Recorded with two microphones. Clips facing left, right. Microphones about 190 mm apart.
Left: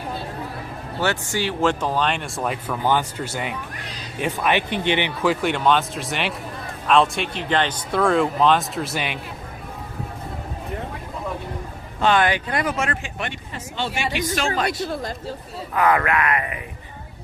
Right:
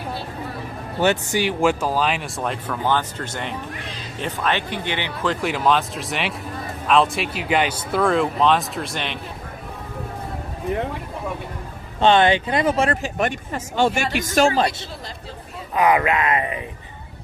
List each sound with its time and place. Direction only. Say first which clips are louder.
0.9 s speech: right 4 dB; 20° right (ahead or behind); by 5.3 s 20° left (ahead or behind)
5.3 s speech: right 1 dB; centre (ahead or behind)
11.9 s speech: right 3 dB; 25° right (ahead or behind)
15.7 s a sound: right 1 dB; 15° right (ahead or behind)